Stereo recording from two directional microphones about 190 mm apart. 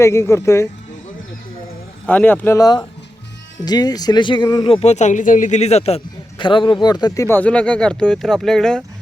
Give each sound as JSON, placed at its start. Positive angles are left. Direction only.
{"t": 0.0, "sound": "speech", "side_deg": 15}
{"t": 2.0, "sound": "speech", "side_deg": 10}